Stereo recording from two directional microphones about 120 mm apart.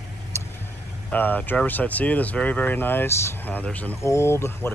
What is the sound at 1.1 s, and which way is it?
Speech, 15° left (ahead or behind).